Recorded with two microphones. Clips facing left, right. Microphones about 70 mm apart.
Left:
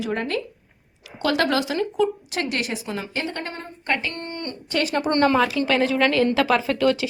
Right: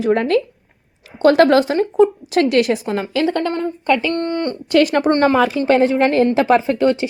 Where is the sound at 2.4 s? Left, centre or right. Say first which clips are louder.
Right 12 dB; right.